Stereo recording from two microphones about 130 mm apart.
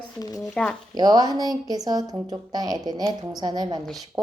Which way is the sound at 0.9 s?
30° right (ahead or behind).